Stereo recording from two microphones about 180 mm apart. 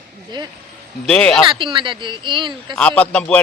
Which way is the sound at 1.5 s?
25° right (ahead or behind).